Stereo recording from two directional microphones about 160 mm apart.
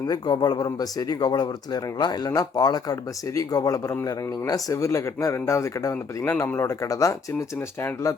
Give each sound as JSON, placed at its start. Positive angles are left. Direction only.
{"t": 0.1, "sound": "speech", "side_deg": 25}